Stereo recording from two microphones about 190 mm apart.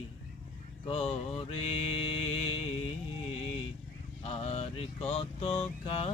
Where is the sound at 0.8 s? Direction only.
30° left (ahead or behind).